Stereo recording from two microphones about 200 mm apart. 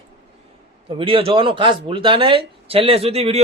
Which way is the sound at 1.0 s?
25° right (ahead or behind).